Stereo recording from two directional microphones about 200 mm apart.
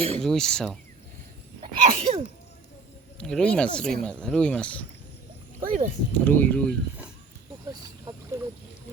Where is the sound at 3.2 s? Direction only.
5° left (ahead or behind).